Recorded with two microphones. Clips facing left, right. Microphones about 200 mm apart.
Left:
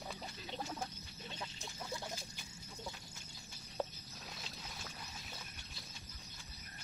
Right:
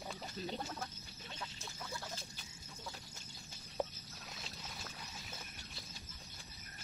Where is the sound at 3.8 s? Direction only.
10° right (ahead or behind).